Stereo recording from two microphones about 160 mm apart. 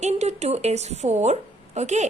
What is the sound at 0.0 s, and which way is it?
A woman's voice, 45° right (ahead or behind).